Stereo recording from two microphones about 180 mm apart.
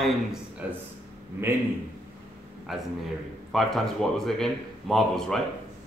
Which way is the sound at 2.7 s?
Centre (ahead or behind).